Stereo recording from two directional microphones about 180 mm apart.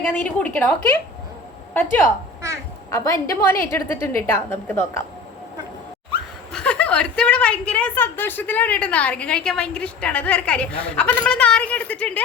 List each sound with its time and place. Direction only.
0.0 s a woman's voice: 10° left (ahead or behind)
6.5 s a woman's voice: 5° left (ahead or behind)